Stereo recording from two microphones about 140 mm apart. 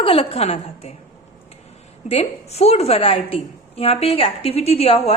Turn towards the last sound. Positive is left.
turn(degrees=45)  # may be behind; listen again after turning